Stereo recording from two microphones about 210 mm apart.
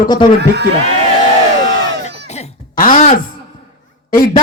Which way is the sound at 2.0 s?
35° left (ahead or behind).